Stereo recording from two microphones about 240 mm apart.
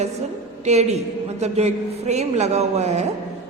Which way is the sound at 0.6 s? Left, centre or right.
Right.